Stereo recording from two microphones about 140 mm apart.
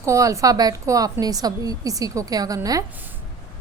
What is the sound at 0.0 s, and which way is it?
A woman's voice, 20° right (ahead or behind).